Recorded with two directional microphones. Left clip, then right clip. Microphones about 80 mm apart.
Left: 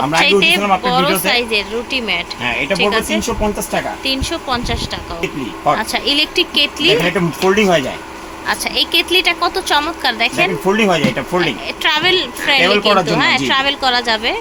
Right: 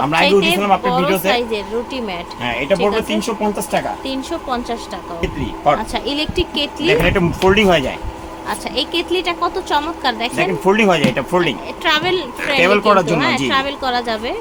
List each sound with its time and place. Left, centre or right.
0.1 s a woman's voice: centre
2.4 s a woman's voice: centre
11.8 s a woman's voice: centre